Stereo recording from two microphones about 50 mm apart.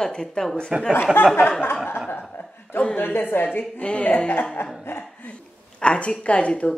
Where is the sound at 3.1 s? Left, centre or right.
Left.